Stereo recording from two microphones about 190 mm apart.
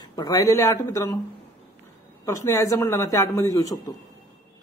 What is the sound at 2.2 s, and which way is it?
Speech, 15° left (ahead or behind).